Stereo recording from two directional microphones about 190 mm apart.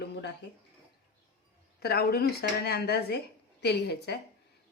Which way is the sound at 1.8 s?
55° left (ahead or behind).